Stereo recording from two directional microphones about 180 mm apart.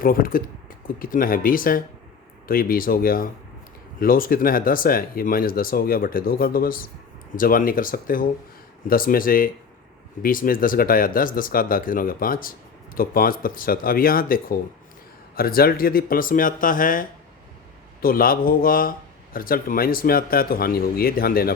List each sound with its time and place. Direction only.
0.0 s speech: 50° left (ahead or behind)